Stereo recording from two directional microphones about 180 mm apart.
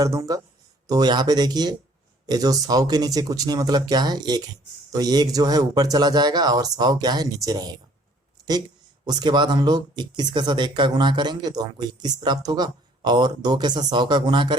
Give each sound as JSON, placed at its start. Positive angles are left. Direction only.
{"t": 0.0, "sound": "speech", "side_deg": -20}
{"t": 9.0, "sound": "speech", "side_deg": -25}